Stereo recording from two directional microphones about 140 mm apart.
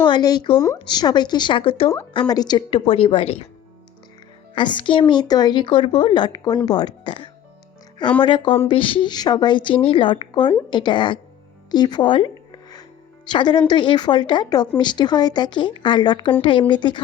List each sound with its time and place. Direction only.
0.0 s speech: 30° left (ahead or behind)
2.1 s speech: 30° left (ahead or behind); by 3.4 s 45° left (ahead or behind)
4.5 s speech: 35° left (ahead or behind)
11.7 s music: 30° left (ahead or behind)
13.3 s speech: 30° left (ahead or behind)